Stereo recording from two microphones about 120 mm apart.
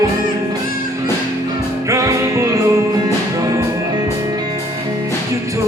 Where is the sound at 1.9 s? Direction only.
25° right (ahead or behind).